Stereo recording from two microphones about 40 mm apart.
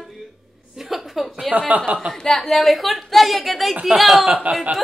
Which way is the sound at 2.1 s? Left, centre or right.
Centre.